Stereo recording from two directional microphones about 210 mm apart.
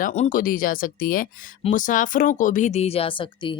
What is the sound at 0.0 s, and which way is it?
Speech, 35° left (ahead or behind).